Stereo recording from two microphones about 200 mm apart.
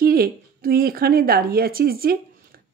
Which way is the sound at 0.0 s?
50° right (ahead or behind).